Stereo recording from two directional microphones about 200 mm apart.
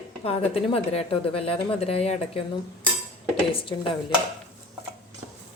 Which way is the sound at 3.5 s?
25° left (ahead or behind).